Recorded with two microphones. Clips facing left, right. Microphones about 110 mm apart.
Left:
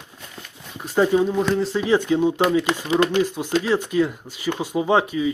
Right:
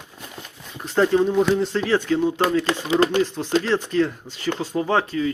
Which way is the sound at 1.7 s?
15° left (ahead or behind).